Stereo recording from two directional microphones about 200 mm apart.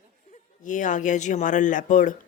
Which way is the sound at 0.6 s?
40° left (ahead or behind).